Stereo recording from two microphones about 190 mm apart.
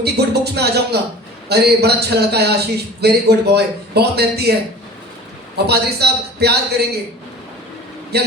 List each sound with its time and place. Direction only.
0.0 s a man's voice: 60° right (ahead or behind)
5.6 s a man's voice: 60° right (ahead or behind)
8.1 s a man's voice: 60° right (ahead or behind)